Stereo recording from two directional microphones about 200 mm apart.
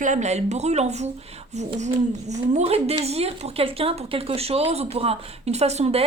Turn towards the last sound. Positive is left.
turn(degrees=-30)  # may be behind; listen again after turning